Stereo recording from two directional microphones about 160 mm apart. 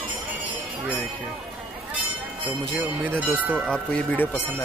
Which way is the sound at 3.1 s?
10° right (ahead or behind).